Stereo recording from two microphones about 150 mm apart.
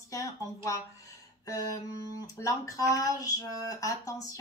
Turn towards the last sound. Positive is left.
turn(degrees=25)  # may be behind; listen again after turning